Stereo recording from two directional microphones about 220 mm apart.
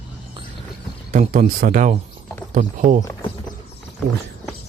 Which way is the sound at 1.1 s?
35° right (ahead or behind).